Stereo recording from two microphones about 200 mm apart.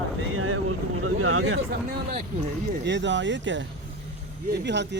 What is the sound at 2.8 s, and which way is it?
Speech, 65° right (ahead or behind).